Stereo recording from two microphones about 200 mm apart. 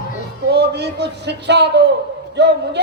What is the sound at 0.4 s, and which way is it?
A man's voice, 55° right (ahead or behind).